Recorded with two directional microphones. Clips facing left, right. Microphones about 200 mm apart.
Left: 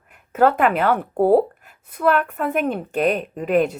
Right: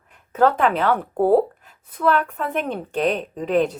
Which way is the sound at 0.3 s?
10° left (ahead or behind).